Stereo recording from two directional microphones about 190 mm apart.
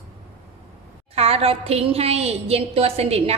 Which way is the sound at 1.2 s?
30° right (ahead or behind).